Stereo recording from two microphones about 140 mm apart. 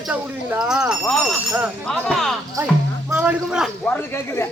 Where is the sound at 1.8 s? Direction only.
5° left (ahead or behind).